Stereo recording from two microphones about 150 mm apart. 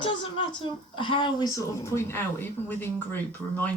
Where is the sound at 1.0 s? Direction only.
35° left (ahead or behind).